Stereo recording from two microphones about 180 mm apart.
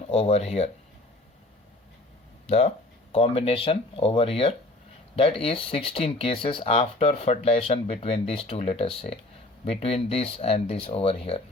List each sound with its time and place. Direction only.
0.1 s speech: 35° left (ahead or behind)
2.5 s speech: 35° left (ahead or behind)